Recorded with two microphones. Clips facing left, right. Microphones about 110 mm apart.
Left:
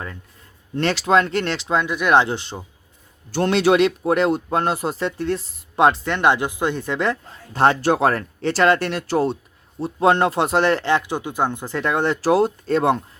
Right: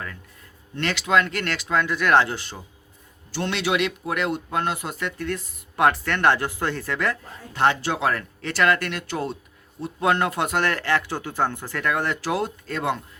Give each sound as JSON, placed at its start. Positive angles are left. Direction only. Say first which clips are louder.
{"t": 0.8, "sound": "speech", "louder": "left 4 dB", "side_deg": 35}
{"t": 3.3, "sound": "speech", "louder": "left 8 dB", "side_deg": 45}
{"t": 7.5, "sound": "speech", "louder": "left 5 dB", "side_deg": 35}